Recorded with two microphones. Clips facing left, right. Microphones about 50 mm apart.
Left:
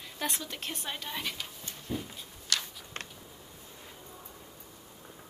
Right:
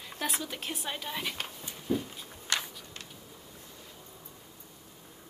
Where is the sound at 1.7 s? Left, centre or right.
Centre.